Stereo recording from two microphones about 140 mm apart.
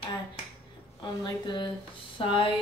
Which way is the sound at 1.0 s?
35° left (ahead or behind).